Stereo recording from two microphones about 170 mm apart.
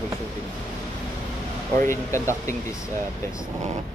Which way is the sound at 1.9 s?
15° left (ahead or behind).